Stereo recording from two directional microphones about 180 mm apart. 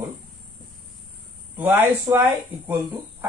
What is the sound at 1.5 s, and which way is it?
Speech, 10° right (ahead or behind).